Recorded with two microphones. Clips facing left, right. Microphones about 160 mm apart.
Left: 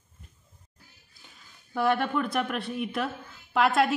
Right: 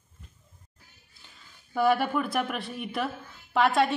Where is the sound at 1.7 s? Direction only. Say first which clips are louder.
Right 2 dB; 5° right (ahead or behind).